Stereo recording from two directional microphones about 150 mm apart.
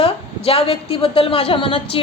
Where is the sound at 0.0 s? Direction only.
40° left (ahead or behind).